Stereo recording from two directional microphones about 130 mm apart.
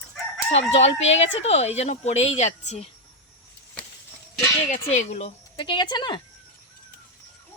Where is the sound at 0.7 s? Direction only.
55° left (ahead or behind).